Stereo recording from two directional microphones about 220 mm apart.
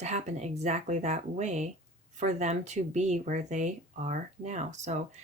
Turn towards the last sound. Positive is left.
turn(degrees=-30)  # may be behind; listen again after turning